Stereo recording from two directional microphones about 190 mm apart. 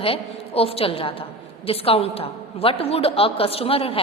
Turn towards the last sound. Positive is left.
turn(degrees=30)  # may be behind; listen again after turning